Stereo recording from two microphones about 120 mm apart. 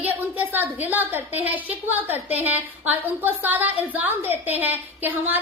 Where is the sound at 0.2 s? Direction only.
15° right (ahead or behind).